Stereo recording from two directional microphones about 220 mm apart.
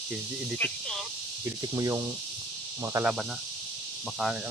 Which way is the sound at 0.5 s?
5° left (ahead or behind).